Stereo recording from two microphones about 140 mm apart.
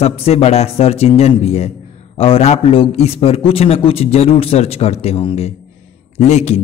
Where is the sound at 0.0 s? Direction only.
45° left (ahead or behind).